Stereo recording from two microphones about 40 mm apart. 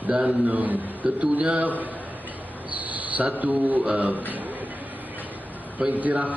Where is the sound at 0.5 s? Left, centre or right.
Right.